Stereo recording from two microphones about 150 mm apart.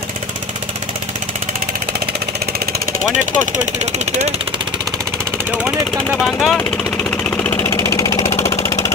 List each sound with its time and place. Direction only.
3.1 s speech: 55° right (ahead or behind)
6.1 s speech: centre (ahead or behind)
7.1 s vehicle: 10° left (ahead or behind)